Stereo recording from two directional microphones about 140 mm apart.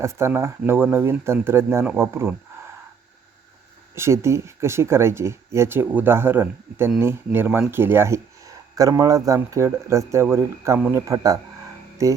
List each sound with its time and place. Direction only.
0.0 s speech: 20° right (ahead or behind)
3.9 s speech: 20° right (ahead or behind)